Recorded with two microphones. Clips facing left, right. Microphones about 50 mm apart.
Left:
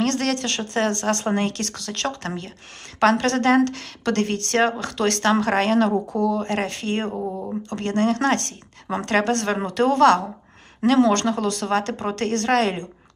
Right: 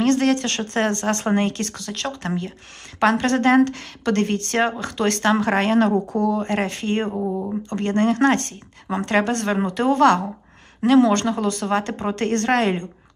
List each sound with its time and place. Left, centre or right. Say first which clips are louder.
0.0 s a woman's voice: right 4 dB; centre
1.9 s a woman's voice: even; centre; by 5.9 s right
6.1 s speech: right 1 dB; right
6.5 s a woman's voice: right 2 dB; centre
7.1 s speech: right 3 dB; centre
7.7 s a woman's voice: right 1 dB; centre